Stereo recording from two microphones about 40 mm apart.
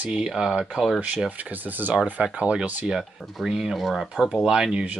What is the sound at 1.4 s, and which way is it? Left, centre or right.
Speech, right.